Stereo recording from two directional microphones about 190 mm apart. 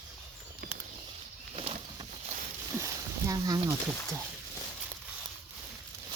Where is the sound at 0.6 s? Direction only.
55° right (ahead or behind).